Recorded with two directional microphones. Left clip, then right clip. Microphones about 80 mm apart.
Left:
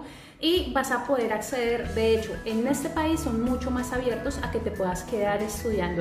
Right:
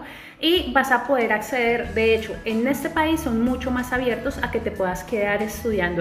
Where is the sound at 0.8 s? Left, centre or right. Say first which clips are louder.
Right 6 dB; left.